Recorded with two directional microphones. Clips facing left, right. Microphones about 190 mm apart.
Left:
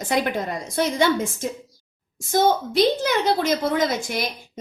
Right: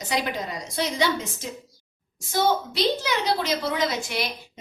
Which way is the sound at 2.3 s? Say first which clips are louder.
Left 4 dB; 50° left (ahead or behind).